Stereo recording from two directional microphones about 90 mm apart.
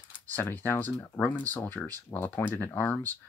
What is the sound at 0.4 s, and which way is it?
Speech, 25° left (ahead or behind).